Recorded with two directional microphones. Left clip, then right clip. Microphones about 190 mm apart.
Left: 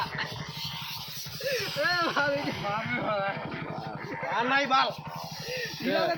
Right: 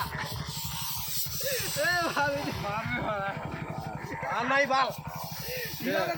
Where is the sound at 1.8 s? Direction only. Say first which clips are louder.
Even; 30° left (ahead or behind).